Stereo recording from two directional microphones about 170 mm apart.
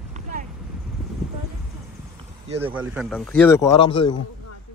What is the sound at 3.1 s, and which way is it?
Speech, 5° left (ahead or behind).